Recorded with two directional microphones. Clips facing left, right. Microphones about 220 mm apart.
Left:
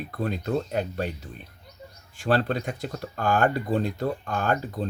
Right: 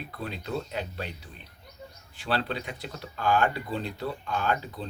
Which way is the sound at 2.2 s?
45° left (ahead or behind).